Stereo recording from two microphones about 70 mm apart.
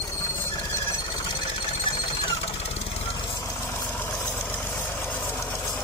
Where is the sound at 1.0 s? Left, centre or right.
Left.